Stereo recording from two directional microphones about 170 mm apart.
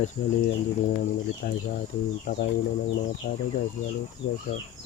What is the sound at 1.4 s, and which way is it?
Speech, 65° left (ahead or behind).